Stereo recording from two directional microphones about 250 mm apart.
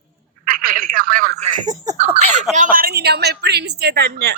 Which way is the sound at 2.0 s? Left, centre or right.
Right.